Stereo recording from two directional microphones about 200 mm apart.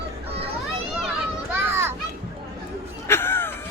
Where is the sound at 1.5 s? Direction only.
10° right (ahead or behind).